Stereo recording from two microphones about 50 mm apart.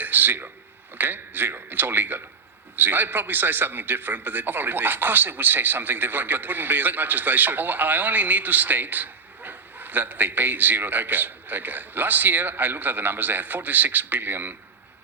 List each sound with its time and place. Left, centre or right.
0.0 s a man's voice: right